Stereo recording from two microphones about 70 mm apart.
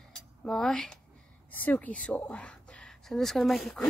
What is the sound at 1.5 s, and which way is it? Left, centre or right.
A woman's voice, left.